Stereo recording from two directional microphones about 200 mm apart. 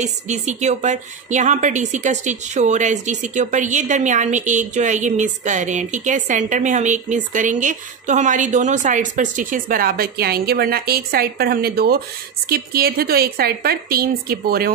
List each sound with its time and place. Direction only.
0.0 s a woman's voice: 35° right (ahead or behind)